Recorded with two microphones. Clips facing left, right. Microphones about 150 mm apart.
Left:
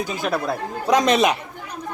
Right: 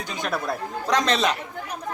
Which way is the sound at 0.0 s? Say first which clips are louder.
Left 4 dB; 5° left (ahead or behind).